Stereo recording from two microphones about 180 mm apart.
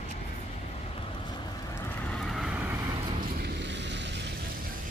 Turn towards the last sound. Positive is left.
turn(degrees=-75)  # may be behind; listen again after turning